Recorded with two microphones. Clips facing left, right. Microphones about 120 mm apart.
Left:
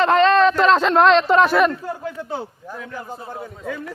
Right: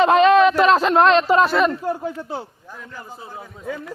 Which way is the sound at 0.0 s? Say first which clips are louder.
Right 2 dB; 15° right (ahead or behind).